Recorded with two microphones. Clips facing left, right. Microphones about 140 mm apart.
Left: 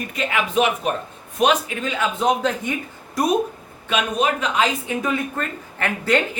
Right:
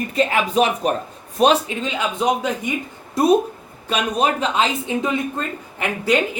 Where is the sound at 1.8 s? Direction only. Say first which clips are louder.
Even; 20° right (ahead or behind).